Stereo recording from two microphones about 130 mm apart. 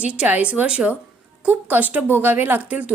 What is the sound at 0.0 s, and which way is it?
A woman's voice, 10° right (ahead or behind).